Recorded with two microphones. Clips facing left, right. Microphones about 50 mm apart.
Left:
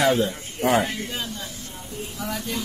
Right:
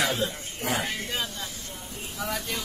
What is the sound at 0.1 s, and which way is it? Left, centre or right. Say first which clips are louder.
Speech: left 6 dB; left.